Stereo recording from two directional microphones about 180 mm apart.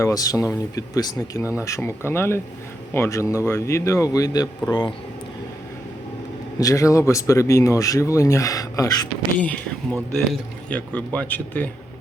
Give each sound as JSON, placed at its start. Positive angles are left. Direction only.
{"t": 0.0, "sound": "speech", "side_deg": 20}
{"t": 6.6, "sound": "speech", "side_deg": 20}